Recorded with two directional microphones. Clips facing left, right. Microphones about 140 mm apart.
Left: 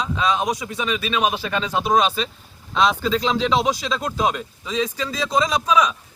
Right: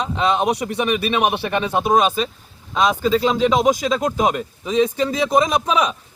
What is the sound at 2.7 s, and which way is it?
Speech, 5° right (ahead or behind).